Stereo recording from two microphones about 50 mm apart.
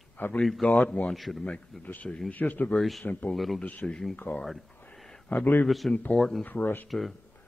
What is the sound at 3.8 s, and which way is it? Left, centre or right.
Speech, centre.